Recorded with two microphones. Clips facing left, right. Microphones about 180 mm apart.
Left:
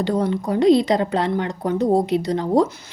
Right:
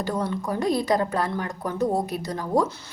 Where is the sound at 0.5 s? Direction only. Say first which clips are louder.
Left 8 dB; 20° left (ahead or behind).